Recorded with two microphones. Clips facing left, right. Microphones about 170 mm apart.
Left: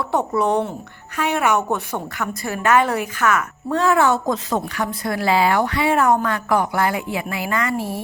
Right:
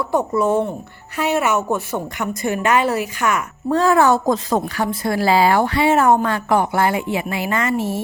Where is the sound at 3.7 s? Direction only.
35° right (ahead or behind).